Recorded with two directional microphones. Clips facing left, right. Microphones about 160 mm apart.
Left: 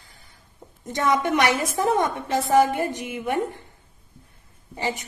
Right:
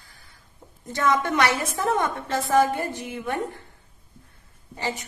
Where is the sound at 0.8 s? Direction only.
20° left (ahead or behind).